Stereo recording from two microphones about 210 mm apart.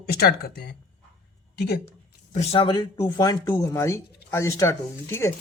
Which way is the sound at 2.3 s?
30° left (ahead or behind).